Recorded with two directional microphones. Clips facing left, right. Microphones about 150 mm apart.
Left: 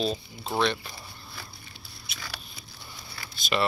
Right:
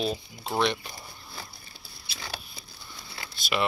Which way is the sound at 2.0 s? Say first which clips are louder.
Right 1 dB; 30° right (ahead or behind).